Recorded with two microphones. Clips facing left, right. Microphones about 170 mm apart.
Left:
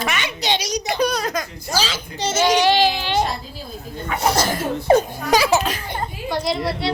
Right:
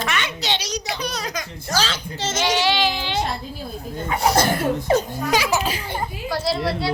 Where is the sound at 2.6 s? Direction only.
45° left (ahead or behind).